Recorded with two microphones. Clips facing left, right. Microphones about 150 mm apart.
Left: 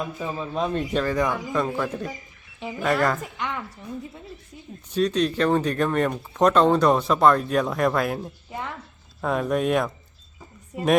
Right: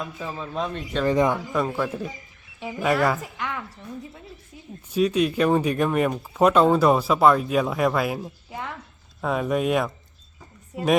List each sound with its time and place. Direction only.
0.2 s speech: 10° left (ahead or behind)
1.0 s speech: 20° right (ahead or behind)
1.5 s speech: 5° right (ahead or behind)
4.9 s speech: 10° right (ahead or behind)